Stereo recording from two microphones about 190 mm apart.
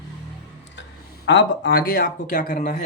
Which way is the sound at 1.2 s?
75° left (ahead or behind).